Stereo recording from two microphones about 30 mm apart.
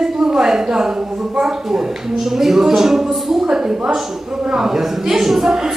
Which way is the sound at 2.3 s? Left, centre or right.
Centre.